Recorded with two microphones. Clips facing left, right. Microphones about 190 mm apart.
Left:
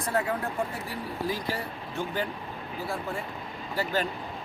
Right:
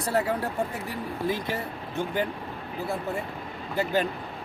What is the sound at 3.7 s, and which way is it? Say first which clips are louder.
Speech: right 3 dB; 20° right (ahead or behind).